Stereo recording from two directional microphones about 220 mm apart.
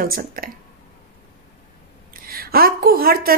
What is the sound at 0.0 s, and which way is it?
Speech, 40° right (ahead or behind).